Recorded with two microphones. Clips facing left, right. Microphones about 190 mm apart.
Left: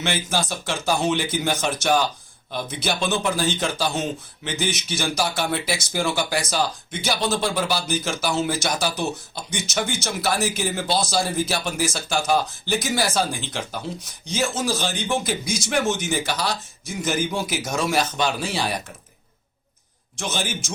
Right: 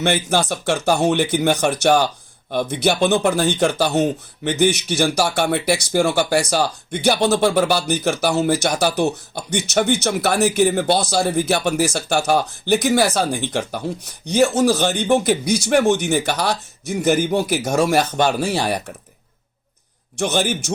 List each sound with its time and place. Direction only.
0.0 s speech: 55° right (ahead or behind)
20.1 s speech: 65° right (ahead or behind)